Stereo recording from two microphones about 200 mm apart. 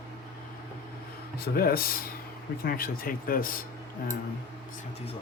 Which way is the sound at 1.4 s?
50° left (ahead or behind).